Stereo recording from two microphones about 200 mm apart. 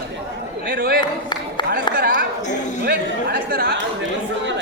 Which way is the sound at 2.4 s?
35° left (ahead or behind).